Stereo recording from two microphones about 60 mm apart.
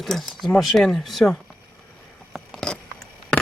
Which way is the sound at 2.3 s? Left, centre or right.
Centre.